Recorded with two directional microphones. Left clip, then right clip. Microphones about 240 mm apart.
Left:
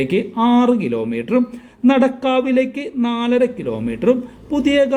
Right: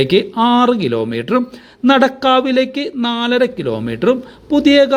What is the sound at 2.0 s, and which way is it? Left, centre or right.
Speech, centre.